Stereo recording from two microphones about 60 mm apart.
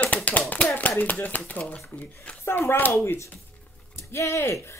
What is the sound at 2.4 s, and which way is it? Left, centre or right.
Speech, left.